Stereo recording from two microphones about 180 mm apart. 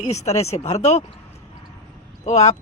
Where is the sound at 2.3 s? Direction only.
40° left (ahead or behind).